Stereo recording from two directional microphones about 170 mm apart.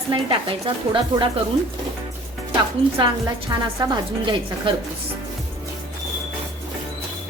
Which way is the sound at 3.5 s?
25° right (ahead or behind).